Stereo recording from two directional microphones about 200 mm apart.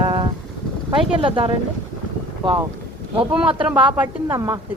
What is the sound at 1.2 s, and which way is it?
Speech, 30° right (ahead or behind).